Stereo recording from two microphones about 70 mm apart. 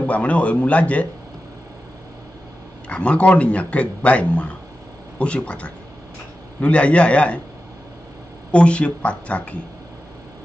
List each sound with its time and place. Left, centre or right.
0.0 s speech: centre
2.9 s speech: centre
8.5 s speech: centre